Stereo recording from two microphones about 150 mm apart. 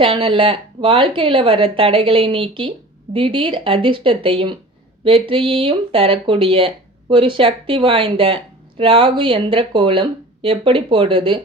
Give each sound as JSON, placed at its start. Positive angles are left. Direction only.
{"t": 0.0, "sound": "speech", "side_deg": -35}